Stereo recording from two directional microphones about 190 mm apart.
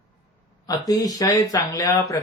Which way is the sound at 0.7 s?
20° left (ahead or behind).